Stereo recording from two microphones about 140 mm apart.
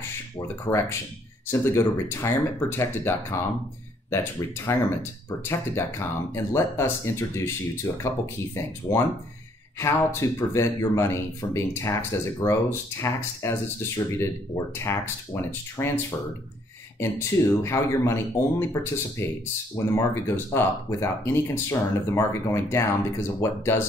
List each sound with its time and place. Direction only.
0.7 s speech: 20° left (ahead or behind)
17.6 s speech: 20° left (ahead or behind)